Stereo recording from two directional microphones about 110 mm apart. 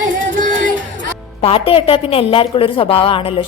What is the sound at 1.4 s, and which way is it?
A woman's voice, 55° left (ahead or behind).